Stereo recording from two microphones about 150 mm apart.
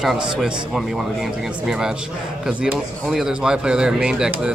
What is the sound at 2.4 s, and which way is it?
Speech, 5° right (ahead or behind).